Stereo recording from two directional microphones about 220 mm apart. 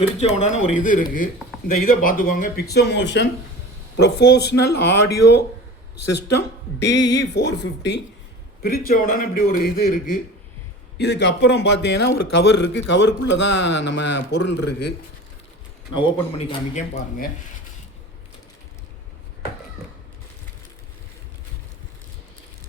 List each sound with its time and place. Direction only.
0.3 s speech: 30° left (ahead or behind)
6.7 s speech: 50° left (ahead or behind)
16.0 s speech: 25° left (ahead or behind)